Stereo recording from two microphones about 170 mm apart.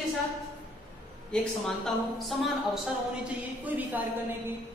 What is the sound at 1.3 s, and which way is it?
A woman's voice, 5° left (ahead or behind).